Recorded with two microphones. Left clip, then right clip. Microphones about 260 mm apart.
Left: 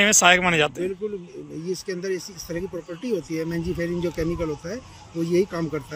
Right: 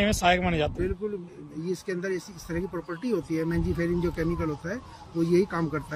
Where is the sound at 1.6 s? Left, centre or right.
Centre.